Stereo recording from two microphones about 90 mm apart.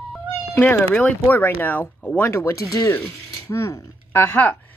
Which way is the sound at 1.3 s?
20° left (ahead or behind).